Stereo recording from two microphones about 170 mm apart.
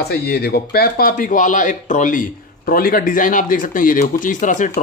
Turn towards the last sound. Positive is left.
turn(degrees=45)  # may be behind; listen again after turning